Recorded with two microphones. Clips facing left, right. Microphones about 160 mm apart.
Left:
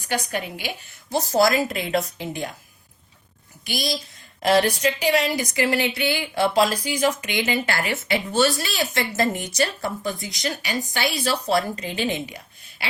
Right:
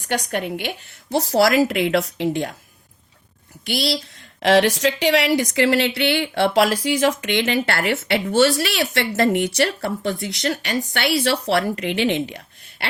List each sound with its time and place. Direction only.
0.1 s speech: 60° right (ahead or behind)
1.1 s speech: 70° right (ahead or behind)
3.6 s a woman's voice: 70° right (ahead or behind)